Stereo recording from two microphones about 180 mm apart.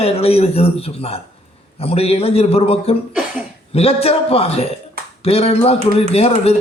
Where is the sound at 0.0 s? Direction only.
35° left (ahead or behind).